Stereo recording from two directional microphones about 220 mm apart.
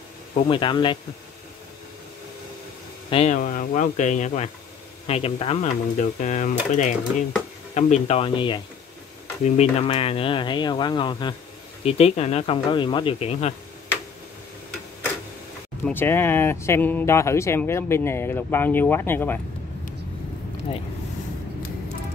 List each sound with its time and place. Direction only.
0.3 s speech: 25° left (ahead or behind)
3.1 s speech: 30° left (ahead or behind)
15.8 s speech: 10° left (ahead or behind)